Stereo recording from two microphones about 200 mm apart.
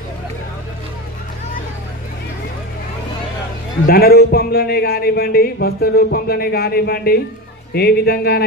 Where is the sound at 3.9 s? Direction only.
50° left (ahead or behind).